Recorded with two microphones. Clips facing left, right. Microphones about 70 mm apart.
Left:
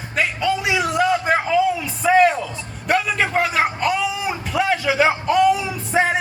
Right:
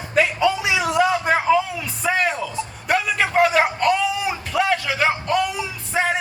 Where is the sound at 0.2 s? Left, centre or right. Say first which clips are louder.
Right 2 dB; centre.